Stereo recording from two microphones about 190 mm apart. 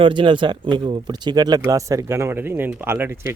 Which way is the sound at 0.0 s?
25° right (ahead or behind).